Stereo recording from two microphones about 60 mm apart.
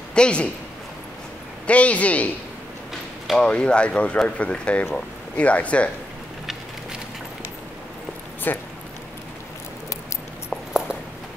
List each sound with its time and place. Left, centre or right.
0.1 s a man's voice: centre
1.7 s speech: left
3.3 s speech: centre
8.5 s speech: left